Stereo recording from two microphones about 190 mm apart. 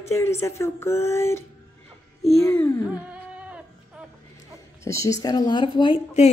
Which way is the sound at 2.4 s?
10° left (ahead or behind).